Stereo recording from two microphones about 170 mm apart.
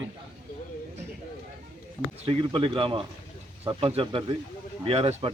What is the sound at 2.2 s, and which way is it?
Speech, 30° right (ahead or behind).